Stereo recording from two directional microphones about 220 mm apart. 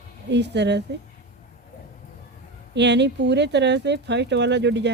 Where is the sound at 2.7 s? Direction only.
50° right (ahead or behind).